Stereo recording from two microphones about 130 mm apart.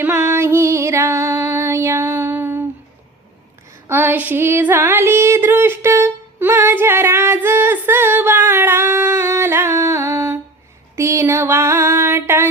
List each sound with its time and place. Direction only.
0.0 s female singing: 20° right (ahead or behind)
3.8 s a sound: 15° right (ahead or behind)
8.4 s humming: 15° right (ahead or behind)
10.9 s female singing: 20° right (ahead or behind)